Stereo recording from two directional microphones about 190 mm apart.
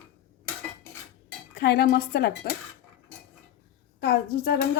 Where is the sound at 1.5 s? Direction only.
55° left (ahead or behind).